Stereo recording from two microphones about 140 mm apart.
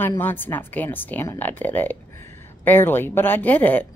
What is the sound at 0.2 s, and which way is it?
Speech, 15° left (ahead or behind).